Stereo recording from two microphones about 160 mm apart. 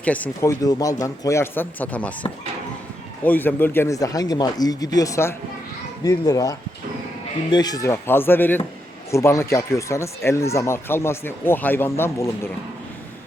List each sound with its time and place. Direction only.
0.0 s speech: 10° left (ahead or behind)
0.6 s speech: 20° left (ahead or behind)
3.2 s speech: 10° left (ahead or behind)